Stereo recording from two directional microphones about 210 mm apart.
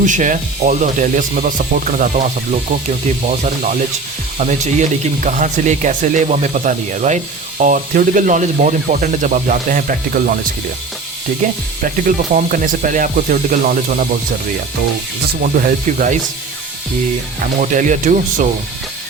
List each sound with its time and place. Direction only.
0.0 s speech: 35° right (ahead or behind)
11.8 s speech: 40° right (ahead or behind)
15.5 s speech: 35° right (ahead or behind)
17.4 s speech: 40° right (ahead or behind)